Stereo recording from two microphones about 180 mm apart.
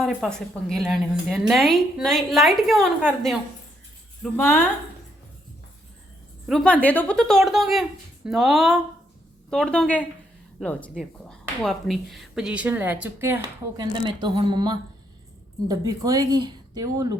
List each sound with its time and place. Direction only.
0.0 s a woman's voice: 5° left (ahead or behind)
4.2 s a woman's voice: 10° left (ahead or behind)
6.5 s a woman's voice: 5° left (ahead or behind); by 13.4 s 10° right (ahead or behind)
13.7 s a woman's voice: 25° right (ahead or behind)